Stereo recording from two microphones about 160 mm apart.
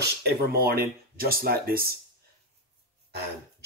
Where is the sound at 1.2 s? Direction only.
70° right (ahead or behind).